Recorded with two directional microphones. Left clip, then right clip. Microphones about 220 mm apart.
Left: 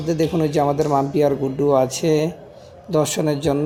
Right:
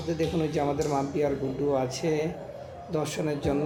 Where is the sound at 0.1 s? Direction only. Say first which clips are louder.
Left 8 dB; 35° left (ahead or behind).